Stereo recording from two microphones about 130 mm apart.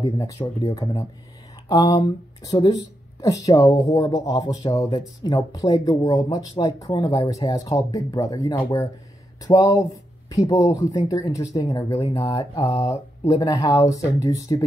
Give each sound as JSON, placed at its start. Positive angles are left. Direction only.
{"t": 0.2, "sound": "speech", "side_deg": 25}